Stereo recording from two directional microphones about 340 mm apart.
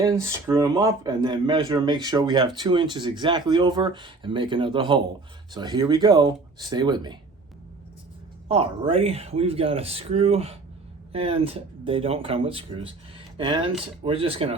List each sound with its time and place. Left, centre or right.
0.0 s speech: centre
8.4 s speech: centre